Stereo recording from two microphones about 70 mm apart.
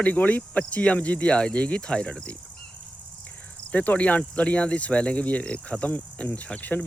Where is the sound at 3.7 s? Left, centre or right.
Centre.